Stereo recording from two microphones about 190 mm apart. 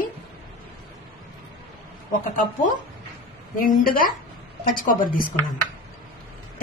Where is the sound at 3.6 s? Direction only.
45° left (ahead or behind).